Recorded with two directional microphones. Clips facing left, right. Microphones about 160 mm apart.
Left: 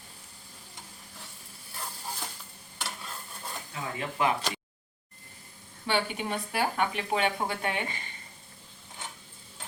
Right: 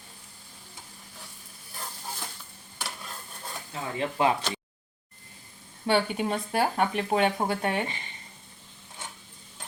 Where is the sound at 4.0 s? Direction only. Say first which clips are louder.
Right 4 dB; 25° right (ahead or behind).